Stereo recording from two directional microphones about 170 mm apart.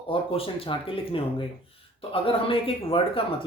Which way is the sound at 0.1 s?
35° left (ahead or behind).